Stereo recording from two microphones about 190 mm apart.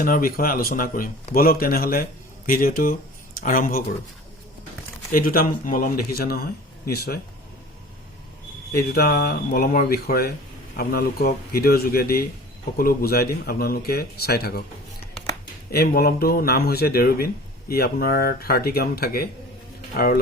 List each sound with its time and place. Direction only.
0.0 s a man's voice: 50° left (ahead or behind)
5.1 s a man's voice: 50° left (ahead or behind)
8.7 s a man's voice: 55° left (ahead or behind)
15.7 s a man's voice: 55° left (ahead or behind)